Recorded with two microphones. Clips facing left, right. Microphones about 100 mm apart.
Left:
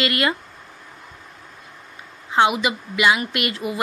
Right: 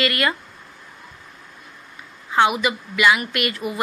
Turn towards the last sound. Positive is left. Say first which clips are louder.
# even
turn(degrees=25)  # may be behind; listen again after turning